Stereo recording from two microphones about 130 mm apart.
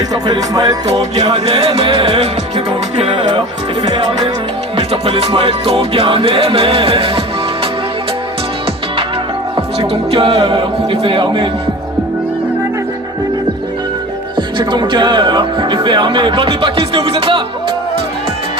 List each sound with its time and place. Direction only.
0.1 s music: 30° right (ahead or behind)
0.9 s music: 55° right (ahead or behind)
2.9 s speech: 40° right (ahead or behind)
4.8 s music: 50° right (ahead or behind)
9.8 s speech: 45° right (ahead or behind)
14.3 s speech: 35° right (ahead or behind)